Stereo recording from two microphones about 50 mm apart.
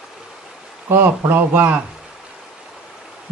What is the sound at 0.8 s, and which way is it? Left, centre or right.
Speech, right.